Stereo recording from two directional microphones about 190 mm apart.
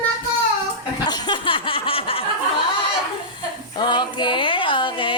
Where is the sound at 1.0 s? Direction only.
25° left (ahead or behind).